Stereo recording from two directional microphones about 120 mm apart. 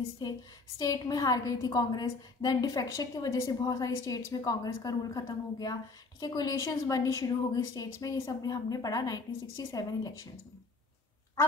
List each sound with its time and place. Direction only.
0.2 s a woman's voice: 35° left (ahead or behind)